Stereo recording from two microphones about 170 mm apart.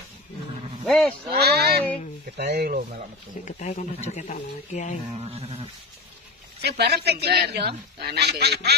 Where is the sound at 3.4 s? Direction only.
45° left (ahead or behind).